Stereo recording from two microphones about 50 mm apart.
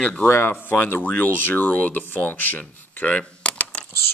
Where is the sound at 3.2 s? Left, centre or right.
Centre.